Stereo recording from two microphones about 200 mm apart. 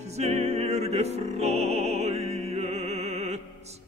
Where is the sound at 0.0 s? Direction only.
35° right (ahead or behind).